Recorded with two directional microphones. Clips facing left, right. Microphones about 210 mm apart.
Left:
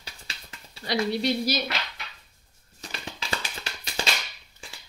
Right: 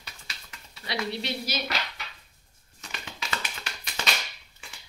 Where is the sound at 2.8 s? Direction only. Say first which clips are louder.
Left 2 dB; 35° left (ahead or behind).